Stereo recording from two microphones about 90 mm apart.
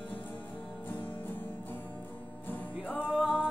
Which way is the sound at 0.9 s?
20° left (ahead or behind).